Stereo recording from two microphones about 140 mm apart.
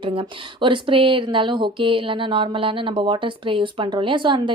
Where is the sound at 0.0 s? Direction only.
40° right (ahead or behind).